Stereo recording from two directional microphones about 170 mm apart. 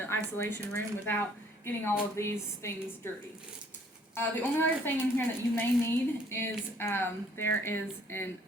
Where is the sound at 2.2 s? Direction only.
15° left (ahead or behind).